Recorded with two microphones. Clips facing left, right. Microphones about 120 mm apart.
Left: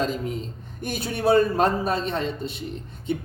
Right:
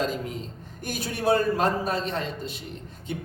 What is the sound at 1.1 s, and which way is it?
A man's voice, 25° left (ahead or behind).